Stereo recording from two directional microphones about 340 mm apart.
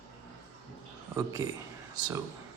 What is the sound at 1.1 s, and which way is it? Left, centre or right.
Speech, centre.